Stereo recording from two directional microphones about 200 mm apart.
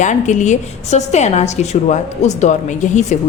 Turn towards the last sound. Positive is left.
turn(degrees=35)  # may be behind; listen again after turning